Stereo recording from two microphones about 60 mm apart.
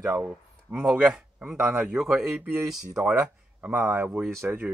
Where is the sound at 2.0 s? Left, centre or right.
Centre.